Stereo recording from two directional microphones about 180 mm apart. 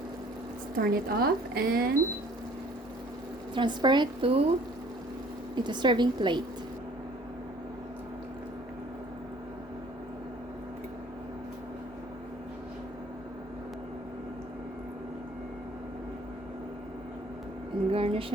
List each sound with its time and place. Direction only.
0.8 s speech: 60° right (ahead or behind)
3.5 s a woman's voice: 25° right (ahead or behind)
5.5 s a woman's voice: 25° right (ahead or behind)
17.9 s a sound: 30° right (ahead or behind)